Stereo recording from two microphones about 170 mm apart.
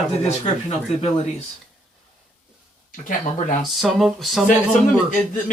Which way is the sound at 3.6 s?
Centre (ahead or behind).